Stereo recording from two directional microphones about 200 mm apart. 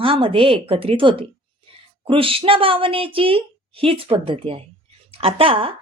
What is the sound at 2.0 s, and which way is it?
A woman's voice, 25° right (ahead or behind).